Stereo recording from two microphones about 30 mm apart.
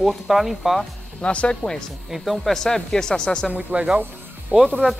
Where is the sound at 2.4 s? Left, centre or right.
Centre.